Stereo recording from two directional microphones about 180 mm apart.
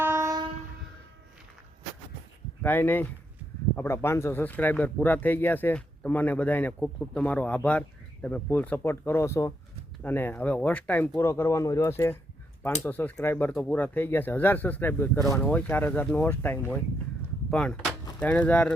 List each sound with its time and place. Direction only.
0.0 s train: 15° right (ahead or behind)
2.6 s speech: 10° left (ahead or behind)